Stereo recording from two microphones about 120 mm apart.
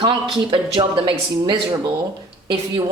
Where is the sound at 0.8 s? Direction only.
40° right (ahead or behind).